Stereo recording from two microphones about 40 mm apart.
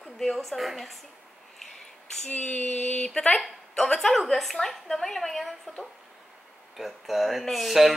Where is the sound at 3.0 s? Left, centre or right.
Centre.